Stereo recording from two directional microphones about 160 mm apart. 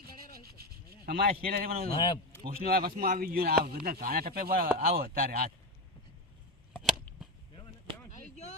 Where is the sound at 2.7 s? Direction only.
70° right (ahead or behind).